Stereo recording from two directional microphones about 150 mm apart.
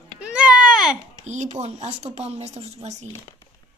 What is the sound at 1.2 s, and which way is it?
A woman's voice, 50° right (ahead or behind).